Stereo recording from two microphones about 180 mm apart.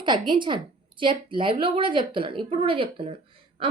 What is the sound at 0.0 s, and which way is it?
A woman's voice, 25° right (ahead or behind).